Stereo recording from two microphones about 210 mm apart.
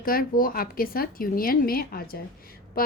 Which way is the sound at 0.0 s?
45° left (ahead or behind).